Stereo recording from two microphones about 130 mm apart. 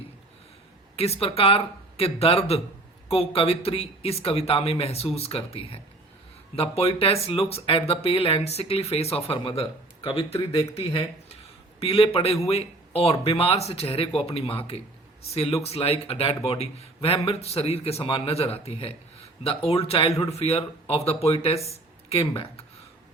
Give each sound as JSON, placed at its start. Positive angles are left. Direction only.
{"t": 0.9, "sound": "speech", "side_deg": 50}